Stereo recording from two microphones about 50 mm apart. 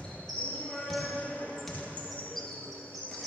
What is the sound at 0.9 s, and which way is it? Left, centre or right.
Basketball bounce, centre.